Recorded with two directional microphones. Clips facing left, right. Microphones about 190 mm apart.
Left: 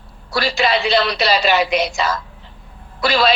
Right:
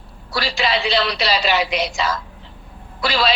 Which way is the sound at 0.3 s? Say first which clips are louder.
Left 4 dB; 50° left (ahead or behind).